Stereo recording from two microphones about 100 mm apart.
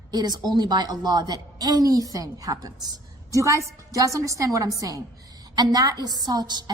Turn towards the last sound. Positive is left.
turn(degrees=-45)  # may be behind; listen again after turning